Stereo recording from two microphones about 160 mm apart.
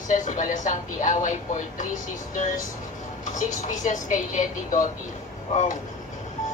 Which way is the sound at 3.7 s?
50° left (ahead or behind).